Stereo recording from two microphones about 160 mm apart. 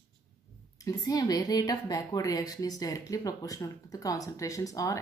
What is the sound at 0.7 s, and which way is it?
A woman's voice, 20° left (ahead or behind).